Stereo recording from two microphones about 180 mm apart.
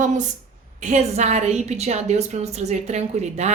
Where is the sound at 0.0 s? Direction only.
45° right (ahead or behind).